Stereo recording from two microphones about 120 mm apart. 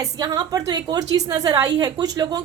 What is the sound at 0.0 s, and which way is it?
A woman's voice, 30° right (ahead or behind).